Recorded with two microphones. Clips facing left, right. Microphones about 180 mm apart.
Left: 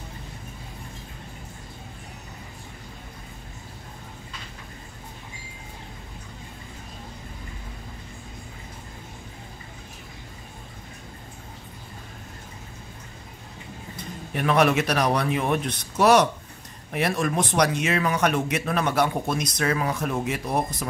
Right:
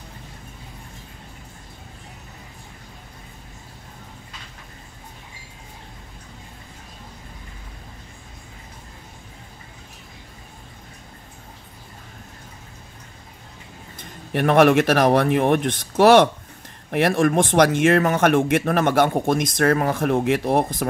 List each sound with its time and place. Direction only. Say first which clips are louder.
14.3 s speech: right 6 dB; 55° right (ahead or behind)
16.9 s speech: right 7 dB; 60° right (ahead or behind)